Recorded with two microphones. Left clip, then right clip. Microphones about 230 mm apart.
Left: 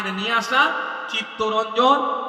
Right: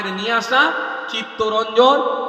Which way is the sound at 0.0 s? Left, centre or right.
Right.